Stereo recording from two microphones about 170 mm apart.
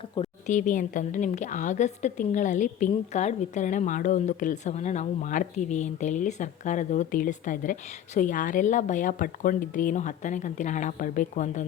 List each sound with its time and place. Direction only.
0.4 s a woman's voice: 45° left (ahead or behind)